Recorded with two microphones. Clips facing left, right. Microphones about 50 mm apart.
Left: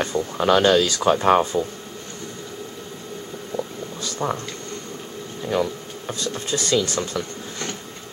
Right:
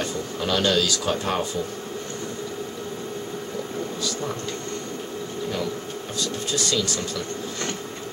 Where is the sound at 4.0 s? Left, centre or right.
Left.